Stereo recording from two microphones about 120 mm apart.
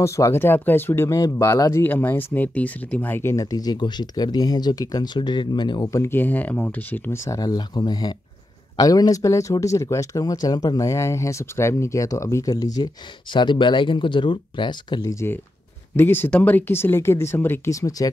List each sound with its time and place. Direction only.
0.0 s speech: 25° left (ahead or behind)
5.9 s speech: 25° left (ahead or behind)
7.2 s speech: 35° left (ahead or behind)
15.0 s speech: 25° left (ahead or behind)